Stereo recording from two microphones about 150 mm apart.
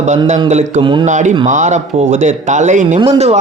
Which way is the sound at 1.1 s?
55° right (ahead or behind).